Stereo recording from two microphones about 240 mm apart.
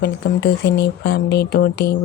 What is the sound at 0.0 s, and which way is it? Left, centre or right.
Speech, left.